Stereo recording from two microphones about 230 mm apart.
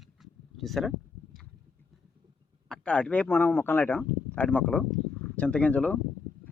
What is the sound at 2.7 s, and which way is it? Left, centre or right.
Speech, centre.